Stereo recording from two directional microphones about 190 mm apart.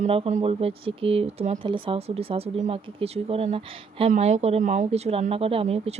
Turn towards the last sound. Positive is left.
turn(degrees=-35)  # may be behind; listen again after turning